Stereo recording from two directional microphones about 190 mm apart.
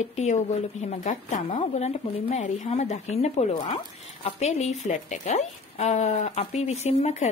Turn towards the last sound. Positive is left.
turn(degrees=35)  # may be behind; listen again after turning